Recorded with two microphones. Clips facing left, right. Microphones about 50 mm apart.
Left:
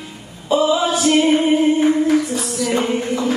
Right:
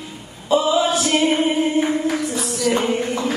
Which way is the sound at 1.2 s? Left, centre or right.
Left.